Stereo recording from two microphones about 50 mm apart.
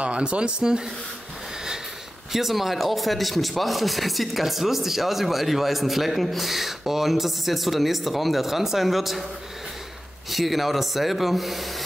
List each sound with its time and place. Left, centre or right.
0.0 s speech: right
2.3 s speech: centre
10.3 s speech: centre